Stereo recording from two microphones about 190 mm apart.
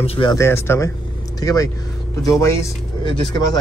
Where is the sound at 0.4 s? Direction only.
15° left (ahead or behind).